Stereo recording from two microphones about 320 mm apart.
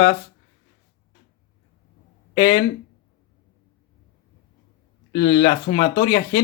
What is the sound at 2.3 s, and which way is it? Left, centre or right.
Speech, centre.